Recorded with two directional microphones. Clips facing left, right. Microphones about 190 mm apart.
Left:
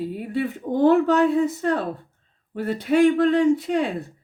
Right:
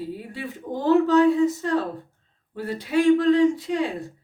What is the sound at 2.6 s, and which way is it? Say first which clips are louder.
A woman's voice: left 2 dB; 60° left (ahead or behind).